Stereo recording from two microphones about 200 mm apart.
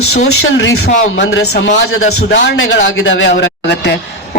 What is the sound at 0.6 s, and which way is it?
A man's voice, 70° left (ahead or behind).